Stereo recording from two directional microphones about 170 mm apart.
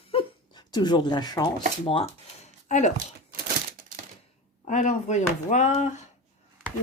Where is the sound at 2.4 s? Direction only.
40° left (ahead or behind).